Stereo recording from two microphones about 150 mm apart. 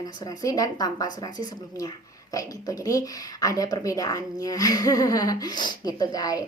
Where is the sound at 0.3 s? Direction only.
25° left (ahead or behind).